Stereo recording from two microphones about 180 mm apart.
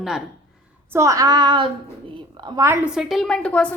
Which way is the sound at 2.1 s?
25° right (ahead or behind).